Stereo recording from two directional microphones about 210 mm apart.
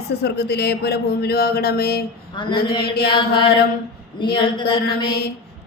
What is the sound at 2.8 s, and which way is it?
Speech, 50° left (ahead or behind).